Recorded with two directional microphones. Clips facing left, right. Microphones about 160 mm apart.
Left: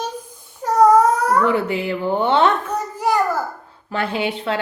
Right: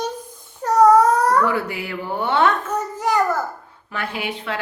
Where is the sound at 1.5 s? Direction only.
25° left (ahead or behind).